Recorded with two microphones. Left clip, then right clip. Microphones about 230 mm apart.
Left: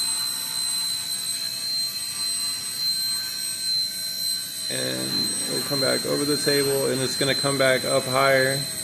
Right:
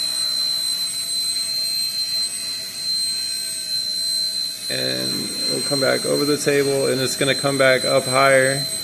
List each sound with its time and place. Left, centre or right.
5.7 s speech: centre